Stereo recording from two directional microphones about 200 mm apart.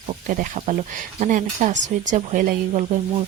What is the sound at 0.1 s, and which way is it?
Speech, 40° right (ahead or behind).